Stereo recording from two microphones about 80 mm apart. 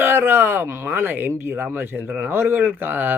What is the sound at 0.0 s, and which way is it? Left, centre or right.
Speech, right.